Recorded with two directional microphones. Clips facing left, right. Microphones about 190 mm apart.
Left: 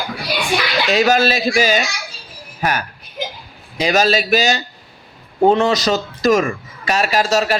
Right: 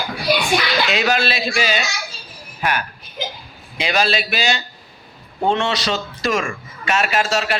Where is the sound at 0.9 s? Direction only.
40° left (ahead or behind).